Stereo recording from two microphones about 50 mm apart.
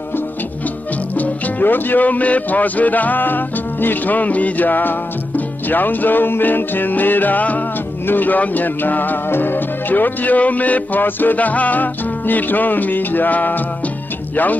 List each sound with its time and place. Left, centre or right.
1.1 s speech: left